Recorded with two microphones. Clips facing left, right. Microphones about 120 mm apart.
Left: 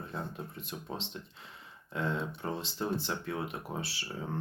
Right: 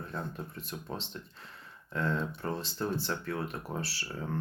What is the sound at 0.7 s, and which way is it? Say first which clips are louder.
Speech: even; 15° left (ahead or behind).